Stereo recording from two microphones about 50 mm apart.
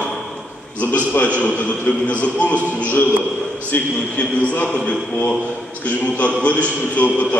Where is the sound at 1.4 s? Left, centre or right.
Left.